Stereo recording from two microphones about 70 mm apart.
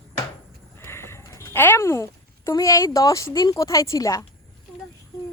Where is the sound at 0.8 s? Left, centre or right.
Left.